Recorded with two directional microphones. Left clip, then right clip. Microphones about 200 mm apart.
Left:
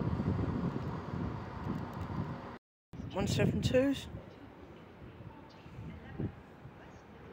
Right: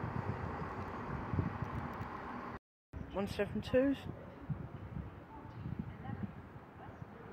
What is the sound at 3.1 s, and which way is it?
Speech, 15° left (ahead or behind).